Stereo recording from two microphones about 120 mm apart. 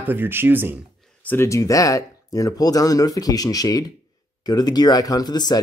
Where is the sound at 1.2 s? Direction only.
20° left (ahead or behind).